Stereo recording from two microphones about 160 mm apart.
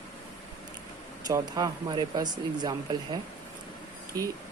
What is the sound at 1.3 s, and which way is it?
Speech, 25° right (ahead or behind).